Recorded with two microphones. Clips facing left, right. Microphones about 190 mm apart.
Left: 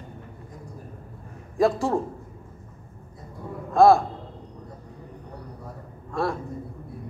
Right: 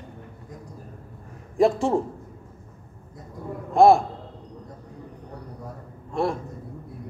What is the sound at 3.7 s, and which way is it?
Speech, 20° right (ahead or behind).